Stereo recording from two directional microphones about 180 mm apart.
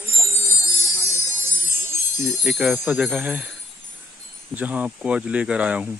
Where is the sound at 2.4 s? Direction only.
5° right (ahead or behind).